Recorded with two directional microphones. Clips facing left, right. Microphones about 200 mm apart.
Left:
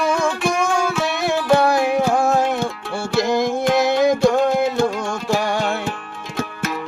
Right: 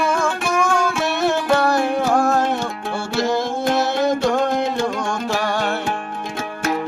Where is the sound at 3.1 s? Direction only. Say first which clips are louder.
Left 3 dB; 15° left (ahead or behind).